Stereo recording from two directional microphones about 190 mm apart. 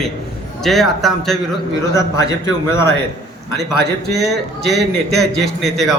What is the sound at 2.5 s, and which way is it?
Speech, 15° left (ahead or behind).